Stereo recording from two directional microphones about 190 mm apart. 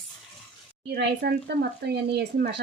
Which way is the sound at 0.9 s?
60° right (ahead or behind).